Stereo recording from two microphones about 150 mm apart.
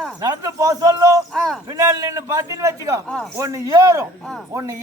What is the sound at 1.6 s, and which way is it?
A man's voice, 20° right (ahead or behind).